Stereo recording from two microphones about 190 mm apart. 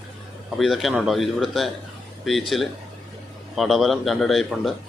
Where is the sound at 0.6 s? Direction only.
Centre (ahead or behind).